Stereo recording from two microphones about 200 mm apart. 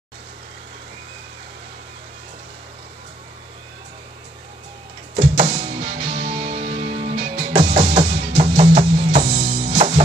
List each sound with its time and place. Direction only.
5.1 s music: 30° right (ahead or behind)